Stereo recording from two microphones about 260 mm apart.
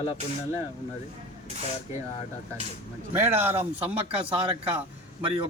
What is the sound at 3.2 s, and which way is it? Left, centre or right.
Speech, centre.